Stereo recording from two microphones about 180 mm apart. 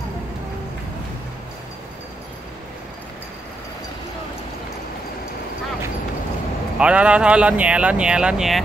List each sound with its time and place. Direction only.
6.8 s speech: 5° right (ahead or behind)